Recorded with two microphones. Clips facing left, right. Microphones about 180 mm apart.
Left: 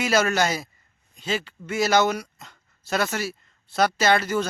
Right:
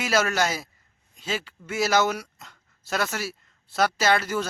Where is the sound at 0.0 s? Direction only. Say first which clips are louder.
Left 2 dB; centre (ahead or behind).